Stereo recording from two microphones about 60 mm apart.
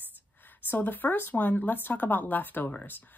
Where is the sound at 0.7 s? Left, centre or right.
Left.